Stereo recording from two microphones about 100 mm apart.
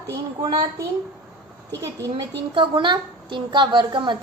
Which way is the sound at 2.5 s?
60° right (ahead or behind).